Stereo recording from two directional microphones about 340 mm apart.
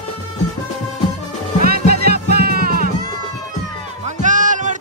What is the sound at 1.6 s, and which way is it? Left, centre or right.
Music, right.